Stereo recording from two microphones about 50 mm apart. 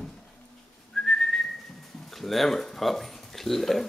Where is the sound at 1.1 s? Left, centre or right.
Centre.